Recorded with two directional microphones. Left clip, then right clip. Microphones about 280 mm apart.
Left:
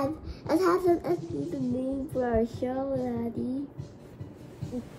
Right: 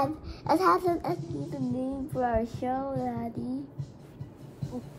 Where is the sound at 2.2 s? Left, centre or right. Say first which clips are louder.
Left 1 dB; centre.